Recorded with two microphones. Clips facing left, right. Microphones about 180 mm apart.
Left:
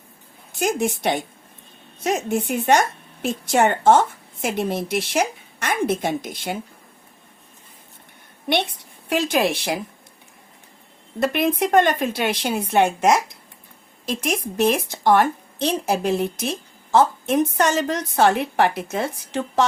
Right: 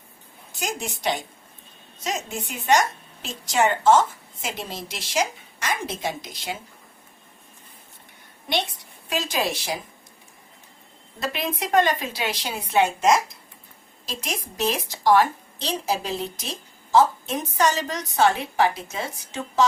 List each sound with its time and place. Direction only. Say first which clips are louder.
0.5 s a woman's voice: left 9 dB; 55° left (ahead or behind)
9.0 s a woman's voice: left 6 dB; 60° left (ahead or behind)
11.2 s a woman's voice: left 8 dB; 55° left (ahead or behind)